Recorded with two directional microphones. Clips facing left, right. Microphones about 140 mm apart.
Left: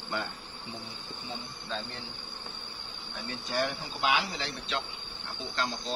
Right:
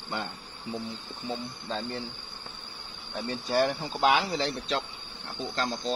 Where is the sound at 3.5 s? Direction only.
40° right (ahead or behind).